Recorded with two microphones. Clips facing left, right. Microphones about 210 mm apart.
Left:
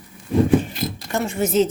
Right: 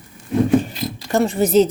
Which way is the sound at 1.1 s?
35° right (ahead or behind).